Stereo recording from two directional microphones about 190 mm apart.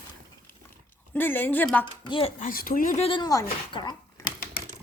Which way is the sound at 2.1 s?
25° left (ahead or behind).